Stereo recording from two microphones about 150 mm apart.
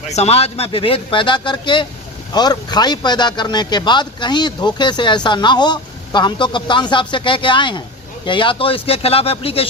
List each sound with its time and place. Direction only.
0.1 s a man's voice: 45° left (ahead or behind)